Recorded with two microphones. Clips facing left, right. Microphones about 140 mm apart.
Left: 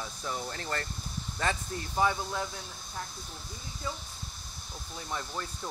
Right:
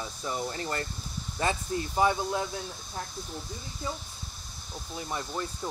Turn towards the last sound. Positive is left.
turn(degrees=-15)  # may be behind; listen again after turning